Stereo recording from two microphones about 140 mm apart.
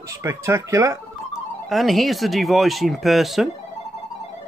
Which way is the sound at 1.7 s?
Centre (ahead or behind).